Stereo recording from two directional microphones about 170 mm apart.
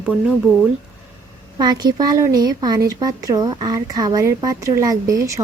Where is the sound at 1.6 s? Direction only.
25° right (ahead or behind).